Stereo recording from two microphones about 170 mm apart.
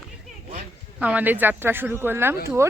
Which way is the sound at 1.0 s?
10° right (ahead or behind).